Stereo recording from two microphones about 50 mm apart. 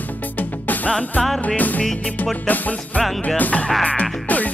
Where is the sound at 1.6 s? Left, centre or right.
Left.